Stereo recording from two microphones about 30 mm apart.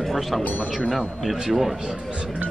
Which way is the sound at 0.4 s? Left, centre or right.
Left.